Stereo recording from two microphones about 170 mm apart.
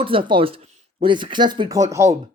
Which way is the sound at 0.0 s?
30° right (ahead or behind).